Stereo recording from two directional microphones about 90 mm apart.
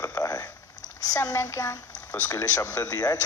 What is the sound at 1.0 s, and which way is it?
Child singing, 40° left (ahead or behind).